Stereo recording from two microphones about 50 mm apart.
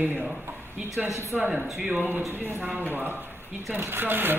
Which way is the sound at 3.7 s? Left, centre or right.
Right.